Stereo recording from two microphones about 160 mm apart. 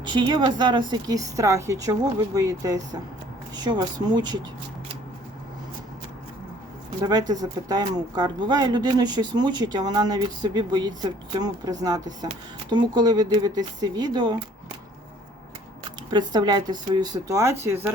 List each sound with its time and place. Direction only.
0.0 s speech: 30° right (ahead or behind)
7.0 s speech: 25° right (ahead or behind)
16.0 s speech: 25° right (ahead or behind)